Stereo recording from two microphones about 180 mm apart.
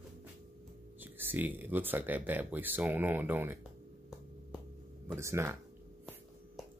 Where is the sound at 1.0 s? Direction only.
10° right (ahead or behind).